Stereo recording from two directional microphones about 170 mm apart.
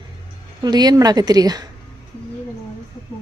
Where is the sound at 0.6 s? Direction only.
25° right (ahead or behind).